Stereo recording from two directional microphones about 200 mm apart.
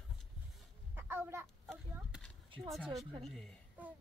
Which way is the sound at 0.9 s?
10° right (ahead or behind).